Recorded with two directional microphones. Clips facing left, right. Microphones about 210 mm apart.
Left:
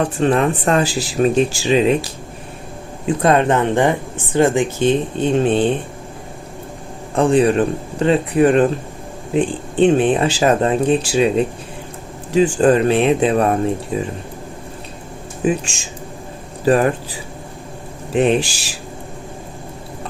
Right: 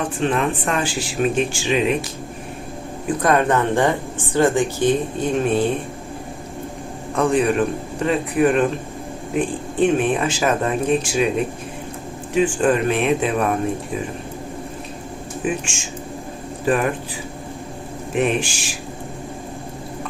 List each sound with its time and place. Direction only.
0.2 s speech: 35° left (ahead or behind)
3.1 s speech: 25° left (ahead or behind)
7.2 s speech: 30° left (ahead or behind)
16.6 s speech: 35° left (ahead or behind)
18.1 s speech: 30° left (ahead or behind)